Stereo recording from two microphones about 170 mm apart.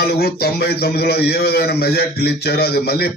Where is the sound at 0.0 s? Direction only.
65° left (ahead or behind).